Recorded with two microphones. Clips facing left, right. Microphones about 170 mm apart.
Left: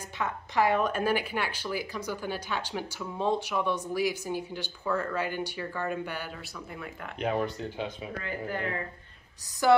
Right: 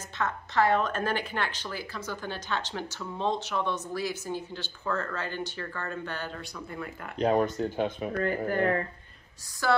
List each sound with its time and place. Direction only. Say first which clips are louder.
0.2 s a woman's voice: right 1 dB; 15° left (ahead or behind)
7.2 s speech: right 5 dB; 40° right (ahead or behind)
9.6 s a woman's voice: left 4 dB; 15° left (ahead or behind)